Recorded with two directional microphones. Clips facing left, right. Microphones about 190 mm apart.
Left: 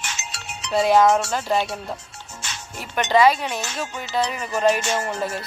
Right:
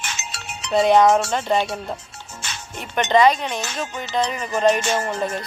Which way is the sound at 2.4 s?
55° right (ahead or behind).